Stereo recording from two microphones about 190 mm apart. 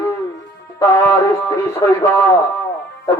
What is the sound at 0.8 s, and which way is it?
Speech, 15° left (ahead or behind).